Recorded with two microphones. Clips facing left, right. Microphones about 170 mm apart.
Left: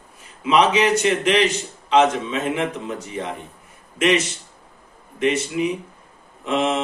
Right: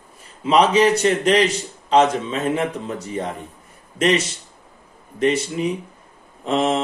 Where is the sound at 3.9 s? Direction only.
35° right (ahead or behind).